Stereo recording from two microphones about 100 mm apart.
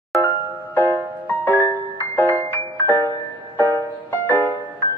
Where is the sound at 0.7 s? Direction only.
20° left (ahead or behind).